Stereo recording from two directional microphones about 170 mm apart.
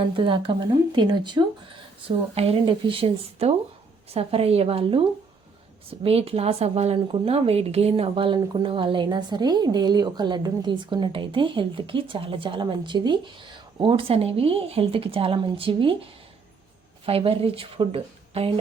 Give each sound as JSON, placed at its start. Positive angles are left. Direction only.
{"t": 0.2, "sound": "a woman's voice", "side_deg": -30}
{"t": 17.1, "sound": "a woman's voice", "side_deg": -35}